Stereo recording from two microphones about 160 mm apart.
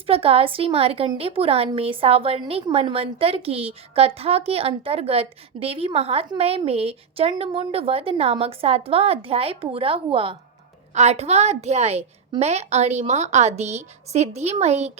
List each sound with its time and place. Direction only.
0.1 s a woman's voice: 35° right (ahead or behind)